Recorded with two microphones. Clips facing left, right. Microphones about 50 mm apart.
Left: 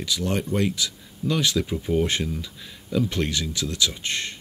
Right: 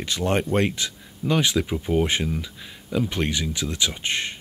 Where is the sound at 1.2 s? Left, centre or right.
Right.